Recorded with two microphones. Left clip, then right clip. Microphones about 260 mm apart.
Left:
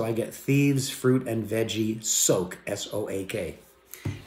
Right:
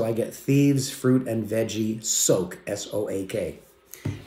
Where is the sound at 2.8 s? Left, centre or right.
Centre.